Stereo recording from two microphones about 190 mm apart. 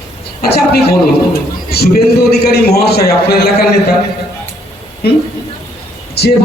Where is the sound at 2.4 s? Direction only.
55° left (ahead or behind).